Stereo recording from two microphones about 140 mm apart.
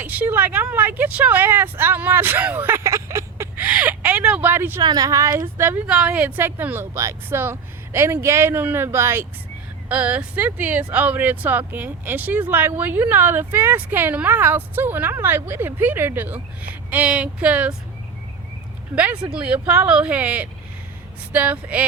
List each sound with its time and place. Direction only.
0.0 s speech: 15° right (ahead or behind)
4.8 s speech: 30° right (ahead or behind); by 17.7 s 10° right (ahead or behind)
19.2 s speech: 10° right (ahead or behind)